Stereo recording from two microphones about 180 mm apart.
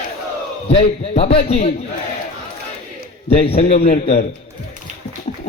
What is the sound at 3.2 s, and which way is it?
A man's voice, 30° left (ahead or behind).